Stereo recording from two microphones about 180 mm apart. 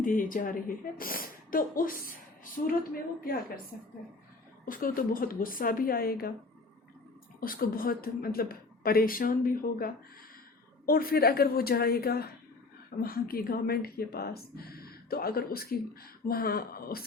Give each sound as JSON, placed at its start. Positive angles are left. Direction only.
{"t": 0.0, "sound": "a woman's voice", "side_deg": 50}
{"t": 4.6, "sound": "a woman's voice", "side_deg": 50}
{"t": 7.3, "sound": "a woman's voice", "side_deg": 55}